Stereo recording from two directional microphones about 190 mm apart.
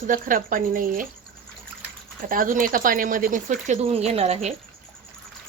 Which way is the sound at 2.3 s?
45° right (ahead or behind).